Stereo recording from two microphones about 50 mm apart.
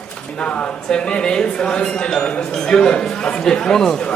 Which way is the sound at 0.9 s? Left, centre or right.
Centre.